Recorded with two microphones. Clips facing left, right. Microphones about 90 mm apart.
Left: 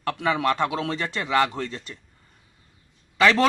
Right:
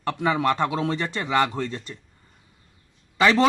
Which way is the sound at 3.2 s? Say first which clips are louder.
Even; 20° right (ahead or behind).